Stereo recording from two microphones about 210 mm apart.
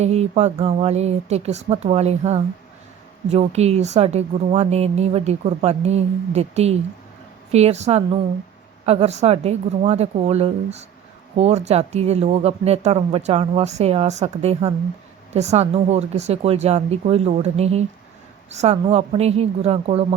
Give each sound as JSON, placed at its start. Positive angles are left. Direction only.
{"t": 0.0, "sound": "a woman's voice", "side_deg": -30}